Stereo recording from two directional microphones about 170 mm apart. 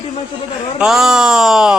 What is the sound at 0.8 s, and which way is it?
A man's voice, 5° right (ahead or behind).